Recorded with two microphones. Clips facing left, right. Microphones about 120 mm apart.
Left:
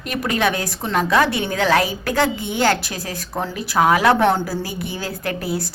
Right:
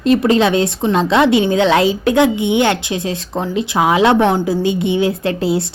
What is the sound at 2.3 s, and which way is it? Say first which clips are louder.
Speech: right 11 dB; 75° right (ahead or behind).